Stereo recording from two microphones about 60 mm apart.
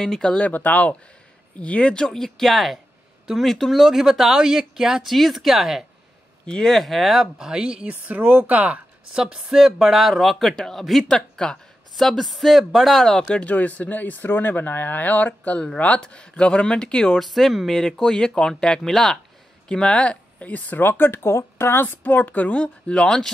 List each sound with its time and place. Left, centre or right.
0.0 s speech: centre
0.4 s speech: left; by 5.9 s centre
6.4 s speech: centre
7.8 s speech: right
9.1 s speech: centre
13.1 s speech: centre
17.3 s speech: centre
19.7 s speech: centre; by 21.8 s left
21.8 s speech: left; by 23.3 s centre